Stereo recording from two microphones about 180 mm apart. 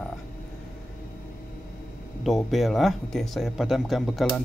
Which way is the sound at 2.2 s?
Centre (ahead or behind).